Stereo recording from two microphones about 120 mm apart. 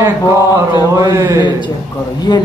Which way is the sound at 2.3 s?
40° left (ahead or behind).